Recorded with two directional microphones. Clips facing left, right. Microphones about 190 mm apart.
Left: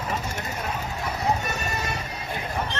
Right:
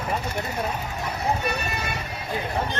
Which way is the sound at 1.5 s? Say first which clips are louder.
Right 2 dB; 40° left (ahead or behind).